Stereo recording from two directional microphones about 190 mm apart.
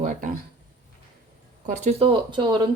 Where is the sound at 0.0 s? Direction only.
45° right (ahead or behind).